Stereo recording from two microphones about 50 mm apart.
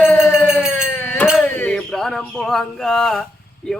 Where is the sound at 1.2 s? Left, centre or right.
Left.